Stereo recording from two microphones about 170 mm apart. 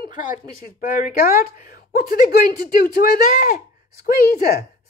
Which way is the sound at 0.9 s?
60° left (ahead or behind).